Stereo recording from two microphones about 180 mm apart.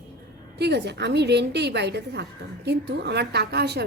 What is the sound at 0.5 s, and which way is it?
A woman's voice, 70° right (ahead or behind).